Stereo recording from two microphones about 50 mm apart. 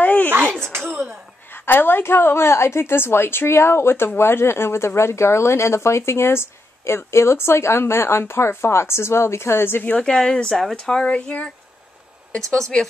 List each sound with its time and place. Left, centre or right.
0.0 s a sound: left
0.3 s a sound: right
1.5 s a woman's voice: left
10.0 s speech: centre
10.5 s speech: centre
10.8 s speech: centre